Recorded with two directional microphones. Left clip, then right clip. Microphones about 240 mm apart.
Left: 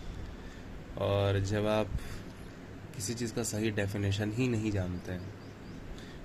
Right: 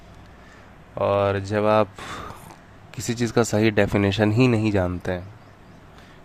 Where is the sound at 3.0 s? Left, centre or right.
Right.